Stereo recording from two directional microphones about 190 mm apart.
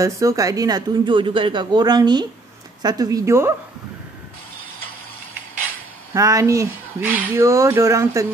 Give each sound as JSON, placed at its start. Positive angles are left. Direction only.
{"t": 0.0, "sound": "speech", "side_deg": -15}
{"t": 6.1, "sound": "speech", "side_deg": -15}